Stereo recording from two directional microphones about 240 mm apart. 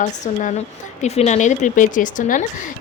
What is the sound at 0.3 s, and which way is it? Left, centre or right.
A woman's voice, left.